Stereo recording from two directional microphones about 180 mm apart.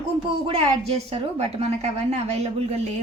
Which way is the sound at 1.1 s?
35° right (ahead or behind).